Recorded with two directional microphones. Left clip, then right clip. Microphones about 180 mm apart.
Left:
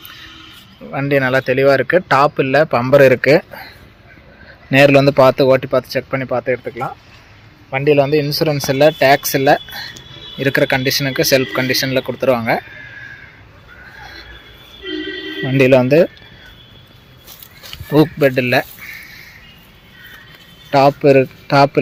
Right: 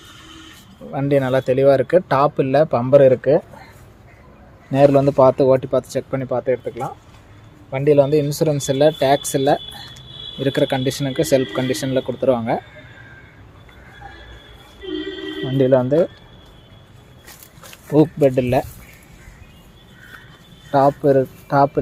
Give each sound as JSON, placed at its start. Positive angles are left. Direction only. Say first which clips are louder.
{"t": 0.9, "sound": "speech", "louder": "left 3 dB", "side_deg": 0}
{"t": 4.7, "sound": "speech", "louder": "left 4 dB", "side_deg": 10}
{"t": 7.7, "sound": "speech", "louder": "left 2 dB", "side_deg": 0}
{"t": 15.5, "sound": "speech", "louder": "left 4 dB", "side_deg": 15}
{"t": 18.2, "sound": "speech", "louder": "left 3 dB", "side_deg": -5}
{"t": 20.7, "sound": "speech", "louder": "left 4 dB", "side_deg": 10}
{"t": 21.2, "sound": "speech", "louder": "left 5 dB", "side_deg": 45}